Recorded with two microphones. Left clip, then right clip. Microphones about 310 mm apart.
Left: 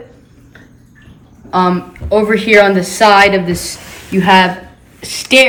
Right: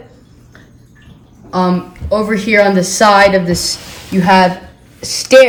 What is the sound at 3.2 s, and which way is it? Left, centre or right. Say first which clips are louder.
Speech: right 1 dB; right.